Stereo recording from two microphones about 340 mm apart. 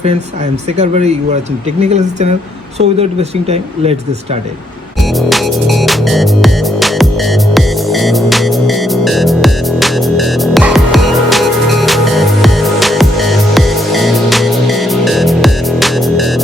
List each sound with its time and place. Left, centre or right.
0.8 s speech: centre
5.3 s music: centre